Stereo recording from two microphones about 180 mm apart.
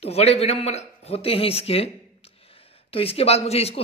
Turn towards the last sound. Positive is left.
turn(degrees=35)  # may be behind; listen again after turning